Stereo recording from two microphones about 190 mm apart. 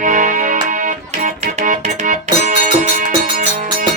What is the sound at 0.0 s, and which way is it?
Music, 45° right (ahead or behind).